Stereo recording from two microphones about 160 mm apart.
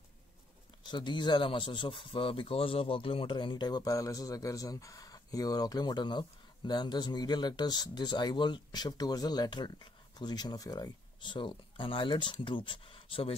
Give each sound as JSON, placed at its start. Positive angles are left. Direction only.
{"t": 0.8, "sound": "speech", "side_deg": 30}